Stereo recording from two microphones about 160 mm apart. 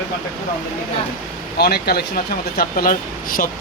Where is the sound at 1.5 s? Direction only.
80° left.